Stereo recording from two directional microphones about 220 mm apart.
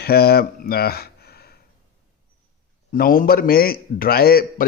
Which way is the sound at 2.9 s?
40° left (ahead or behind).